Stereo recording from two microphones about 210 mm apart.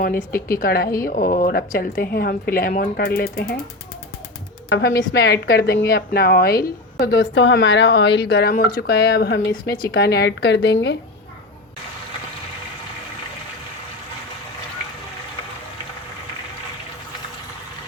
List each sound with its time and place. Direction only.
0.6 s speech: 45° left (ahead or behind)
4.7 s speech: 60° left (ahead or behind)